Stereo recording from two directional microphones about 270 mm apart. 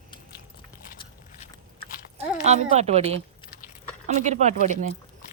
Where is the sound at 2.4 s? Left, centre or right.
Right.